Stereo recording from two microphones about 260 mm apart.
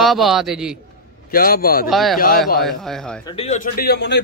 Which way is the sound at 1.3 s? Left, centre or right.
Left.